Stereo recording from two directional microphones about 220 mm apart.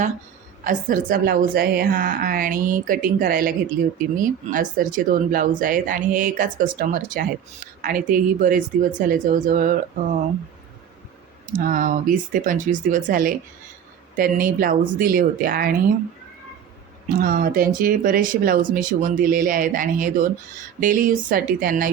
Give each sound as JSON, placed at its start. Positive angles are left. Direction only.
{"t": 0.6, "sound": "speech", "side_deg": -35}
{"t": 11.5, "sound": "speech", "side_deg": -40}
{"t": 17.2, "sound": "speech", "side_deg": -40}